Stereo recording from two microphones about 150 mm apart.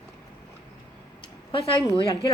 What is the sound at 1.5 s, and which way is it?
Speech, 35° left (ahead or behind).